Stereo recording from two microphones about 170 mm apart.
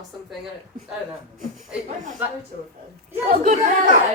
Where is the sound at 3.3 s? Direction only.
50° right (ahead or behind).